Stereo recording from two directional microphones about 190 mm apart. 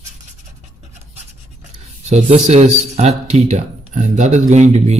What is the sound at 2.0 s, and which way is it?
Speech, 35° right (ahead or behind).